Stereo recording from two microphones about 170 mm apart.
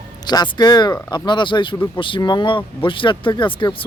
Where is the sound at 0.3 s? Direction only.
25° left (ahead or behind).